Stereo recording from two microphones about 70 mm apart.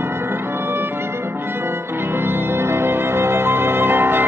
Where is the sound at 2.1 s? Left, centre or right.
Right.